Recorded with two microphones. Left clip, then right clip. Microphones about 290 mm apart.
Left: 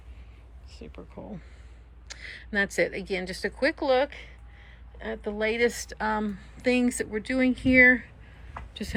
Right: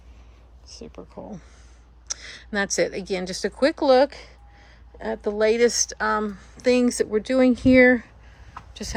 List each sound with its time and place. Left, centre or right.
0.7 s speech: centre
3.9 s a woman's voice: right
5.3 s speech: centre
8.7 s a sound: centre